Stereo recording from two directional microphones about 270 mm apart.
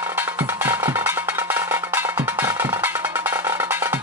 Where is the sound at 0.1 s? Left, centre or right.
Centre.